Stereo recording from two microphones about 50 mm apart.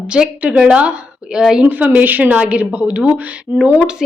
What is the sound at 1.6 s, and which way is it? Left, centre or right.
A woman's voice, right.